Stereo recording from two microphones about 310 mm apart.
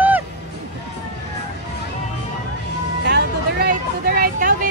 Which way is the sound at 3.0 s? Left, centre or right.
Right.